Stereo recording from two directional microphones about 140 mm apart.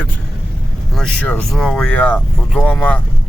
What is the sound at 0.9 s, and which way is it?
Speech, 10° left (ahead or behind).